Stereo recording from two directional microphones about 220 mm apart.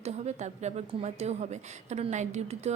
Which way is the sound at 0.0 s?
30° right (ahead or behind).